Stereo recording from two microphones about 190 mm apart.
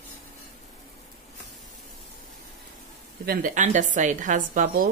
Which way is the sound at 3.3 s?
45° right (ahead or behind).